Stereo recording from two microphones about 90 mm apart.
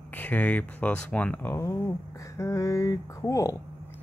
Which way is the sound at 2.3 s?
35° left (ahead or behind).